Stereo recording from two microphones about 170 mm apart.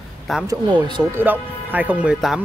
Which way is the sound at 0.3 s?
Centre (ahead or behind).